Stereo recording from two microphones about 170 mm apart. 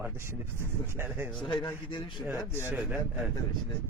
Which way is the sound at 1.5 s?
25° left (ahead or behind).